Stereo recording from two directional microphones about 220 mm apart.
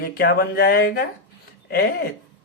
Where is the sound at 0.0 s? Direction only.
45° left (ahead or behind).